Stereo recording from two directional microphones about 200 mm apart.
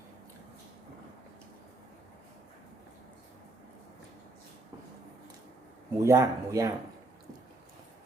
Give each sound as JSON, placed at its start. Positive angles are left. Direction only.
{"t": 6.0, "sound": "speech", "side_deg": -15}